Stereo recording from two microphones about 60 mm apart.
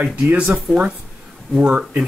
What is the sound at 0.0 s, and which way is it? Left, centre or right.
Speech, right.